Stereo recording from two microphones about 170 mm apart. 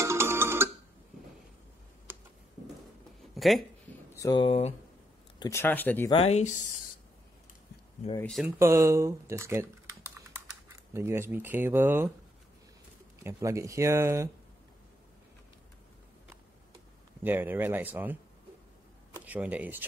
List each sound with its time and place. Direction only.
0.0 s music: 15° right (ahead or behind)
2.1 s tick: 10° right (ahead or behind)
3.3 s speech: centre (ahead or behind)
4.2 s speech: 30° left (ahead or behind)
5.4 s speech: 15° left (ahead or behind)
6.0 s speech: 35° left (ahead or behind)
8.2 s speech: centre (ahead or behind)
8.5 s speech: 15° right (ahead or behind)
13.2 s speech: 20° right (ahead or behind)
17.2 s speech: 10° right (ahead or behind)
19.1 s speech: 10° right (ahead or behind)